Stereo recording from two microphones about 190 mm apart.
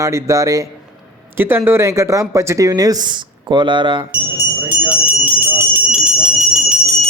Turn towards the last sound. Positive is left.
turn(degrees=0)  # may be behind; listen again after turning